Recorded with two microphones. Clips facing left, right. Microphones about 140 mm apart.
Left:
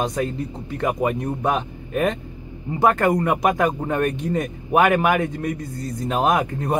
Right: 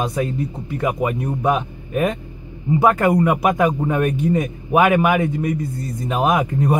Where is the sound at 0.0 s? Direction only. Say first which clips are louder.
Right 2 dB; 5° right (ahead or behind).